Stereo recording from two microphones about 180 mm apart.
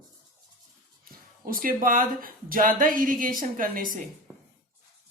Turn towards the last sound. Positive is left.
turn(degrees=-50)  # may be behind; listen again after turning